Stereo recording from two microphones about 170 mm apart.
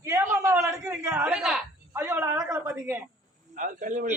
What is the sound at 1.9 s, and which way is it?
Speech, 15° right (ahead or behind).